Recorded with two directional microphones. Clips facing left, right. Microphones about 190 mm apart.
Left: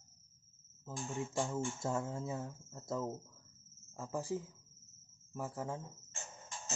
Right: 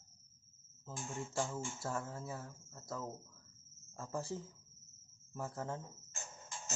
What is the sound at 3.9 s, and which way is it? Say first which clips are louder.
Speech: left 3 dB; 15° left (ahead or behind).